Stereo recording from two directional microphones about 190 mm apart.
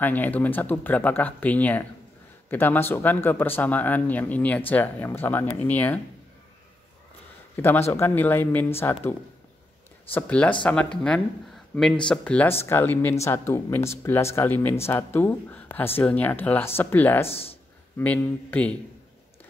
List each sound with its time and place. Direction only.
0.0 s speech: 10° left (ahead or behind)
7.5 s a man's voice: 10° left (ahead or behind)
10.1 s speech: 5° left (ahead or behind)
17.3 s speech: 30° left (ahead or behind)
17.9 s speech: 10° left (ahead or behind)